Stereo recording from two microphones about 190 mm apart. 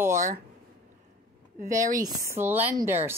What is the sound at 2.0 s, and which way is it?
A woman's voice, 15° right (ahead or behind).